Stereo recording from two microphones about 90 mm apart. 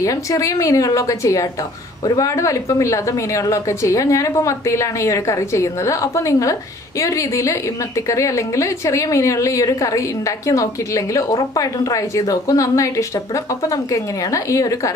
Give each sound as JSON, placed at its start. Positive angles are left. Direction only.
{"t": 0.0, "sound": "speech", "side_deg": 40}